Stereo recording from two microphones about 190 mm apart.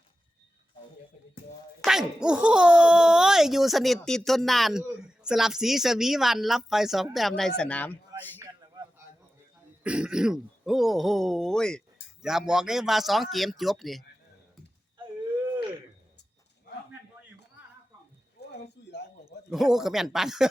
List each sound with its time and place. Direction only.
1.8 s speech: centre (ahead or behind)
9.8 s speech: 5° right (ahead or behind)
18.3 s a sound: 60° left (ahead or behind)
19.5 s speech: centre (ahead or behind)